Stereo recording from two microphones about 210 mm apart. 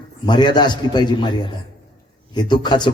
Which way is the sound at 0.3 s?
20° left (ahead or behind).